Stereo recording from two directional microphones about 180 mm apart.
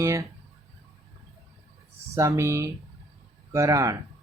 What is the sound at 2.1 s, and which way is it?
Speech, 15° right (ahead or behind).